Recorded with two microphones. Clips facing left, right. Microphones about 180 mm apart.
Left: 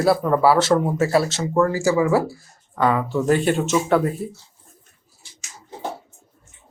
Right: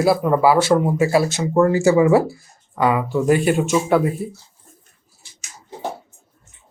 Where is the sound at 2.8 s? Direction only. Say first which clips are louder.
Right 1 dB; 10° right (ahead or behind).